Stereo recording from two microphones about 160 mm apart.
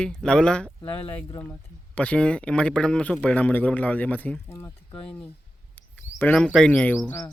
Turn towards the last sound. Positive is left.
turn(degrees=20)  # may be behind; listen again after turning